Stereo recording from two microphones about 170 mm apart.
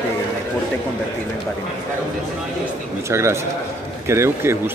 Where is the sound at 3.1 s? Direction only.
15° right (ahead or behind).